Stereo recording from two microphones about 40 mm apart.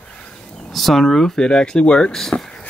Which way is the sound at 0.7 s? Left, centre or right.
Centre.